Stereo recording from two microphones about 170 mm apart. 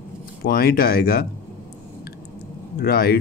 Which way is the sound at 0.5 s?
65° left (ahead or behind).